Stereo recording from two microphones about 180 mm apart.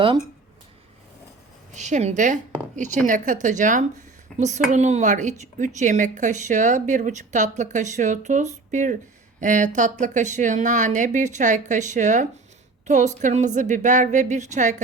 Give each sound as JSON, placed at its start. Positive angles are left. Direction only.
{"t": 1.7, "sound": "a woman's voice", "side_deg": -40}